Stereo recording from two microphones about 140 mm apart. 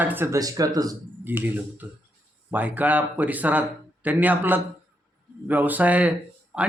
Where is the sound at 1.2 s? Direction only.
15° right (ahead or behind).